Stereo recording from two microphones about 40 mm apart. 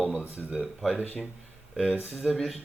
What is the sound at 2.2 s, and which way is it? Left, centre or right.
Speech, centre.